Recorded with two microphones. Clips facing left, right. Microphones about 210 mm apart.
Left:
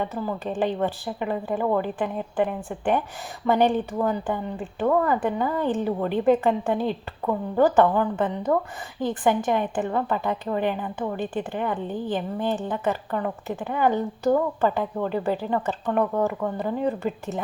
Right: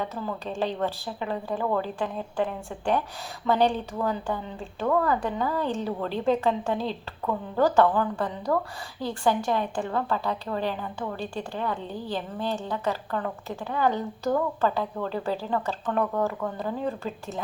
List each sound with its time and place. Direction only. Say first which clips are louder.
0.0 s a woman's voice: left 4 dB; 15° left (ahead or behind)